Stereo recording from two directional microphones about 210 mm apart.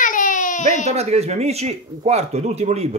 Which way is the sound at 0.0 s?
40° left (ahead or behind).